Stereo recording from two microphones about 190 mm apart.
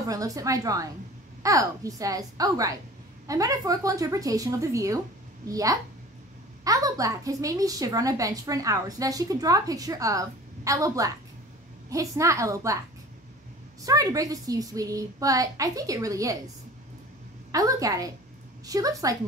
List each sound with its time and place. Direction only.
0.0 s a woman's voice: 20° right (ahead or behind)
13.8 s a woman's voice: 20° right (ahead or behind)
17.5 s a woman's voice: 15° right (ahead or behind)